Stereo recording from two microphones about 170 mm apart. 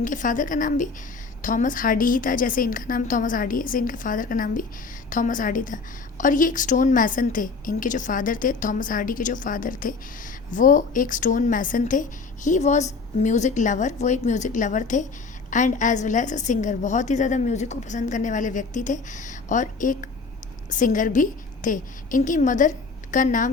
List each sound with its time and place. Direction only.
0.0 s a woman's voice: 50° left (ahead or behind)